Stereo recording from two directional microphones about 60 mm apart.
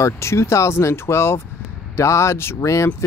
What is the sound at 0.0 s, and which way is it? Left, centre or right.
Speech, left.